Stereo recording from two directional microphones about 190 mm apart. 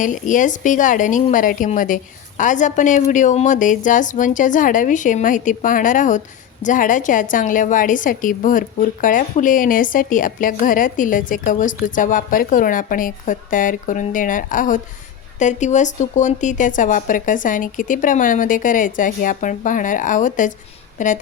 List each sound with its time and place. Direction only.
0.0 s a woman's voice: 45° left (ahead or behind)